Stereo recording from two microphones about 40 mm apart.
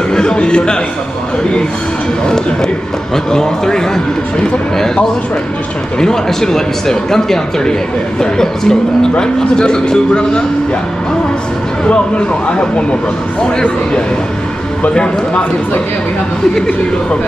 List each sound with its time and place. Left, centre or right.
0.1 s a sound: centre
2.2 s a man's voice: centre
12.4 s a man's voice: left
16.5 s a man's voice: centre